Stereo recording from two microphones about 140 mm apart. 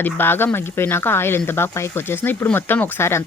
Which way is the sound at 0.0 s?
15° left (ahead or behind).